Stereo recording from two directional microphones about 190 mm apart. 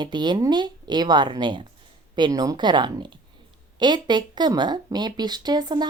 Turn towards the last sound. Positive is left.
turn(degrees=-20)  # may be behind; listen again after turning